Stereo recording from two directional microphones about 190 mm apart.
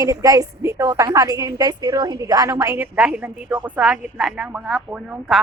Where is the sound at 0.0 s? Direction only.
20° right (ahead or behind).